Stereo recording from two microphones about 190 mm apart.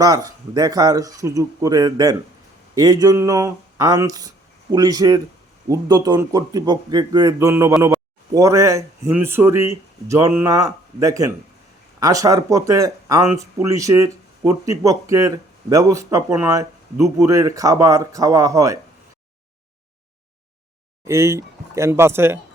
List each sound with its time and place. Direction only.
0.0 s speech: 20° right (ahead or behind)
21.1 s speech: 15° right (ahead or behind)